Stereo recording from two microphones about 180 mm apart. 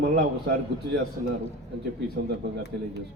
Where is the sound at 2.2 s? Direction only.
65° right (ahead or behind).